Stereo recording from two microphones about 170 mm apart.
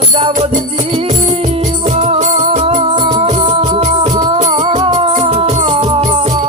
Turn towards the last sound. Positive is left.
turn(degrees=-40)  # may be behind; listen again after turning